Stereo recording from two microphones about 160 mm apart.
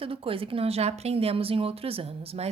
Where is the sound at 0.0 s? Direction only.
35° right (ahead or behind).